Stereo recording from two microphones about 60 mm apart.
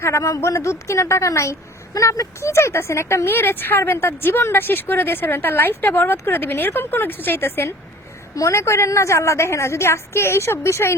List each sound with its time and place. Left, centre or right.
0.0 s a woman's voice: left
8.4 s a woman's voice: left